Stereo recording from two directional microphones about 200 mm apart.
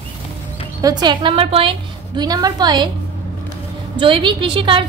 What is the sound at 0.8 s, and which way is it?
A woman's voice, 20° right (ahead or behind).